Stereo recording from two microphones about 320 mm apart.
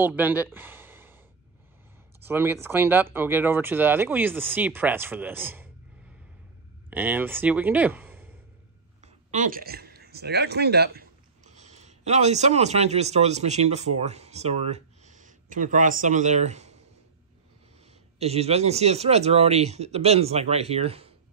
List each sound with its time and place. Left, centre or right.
0.0 s speech: centre
2.2 s speech: centre
6.9 s speech: centre
9.0 s speech: right
18.2 s a man's voice: centre